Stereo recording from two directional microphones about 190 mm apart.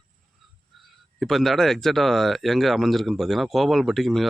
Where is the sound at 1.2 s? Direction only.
Centre (ahead or behind).